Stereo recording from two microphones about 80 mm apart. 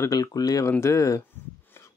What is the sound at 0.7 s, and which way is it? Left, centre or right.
Speech, left.